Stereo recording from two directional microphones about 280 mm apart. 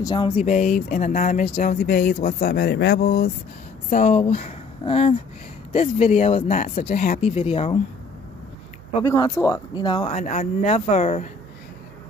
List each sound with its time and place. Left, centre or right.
0.0 s speech: centre
9.0 s speech: centre